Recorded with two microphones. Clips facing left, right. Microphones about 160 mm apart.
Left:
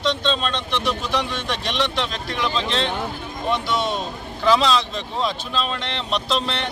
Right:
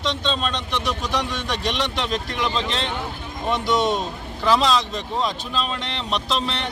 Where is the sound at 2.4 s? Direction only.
15° right (ahead or behind).